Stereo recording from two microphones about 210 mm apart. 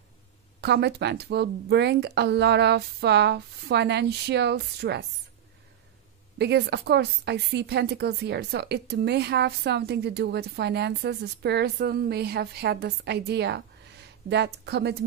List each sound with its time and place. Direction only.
0.6 s a woman's voice: 55° right (ahead or behind)
6.3 s a woman's voice: 55° right (ahead or behind)